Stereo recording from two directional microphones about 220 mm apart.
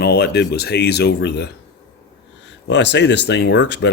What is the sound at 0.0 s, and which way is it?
Speech, 45° left (ahead or behind).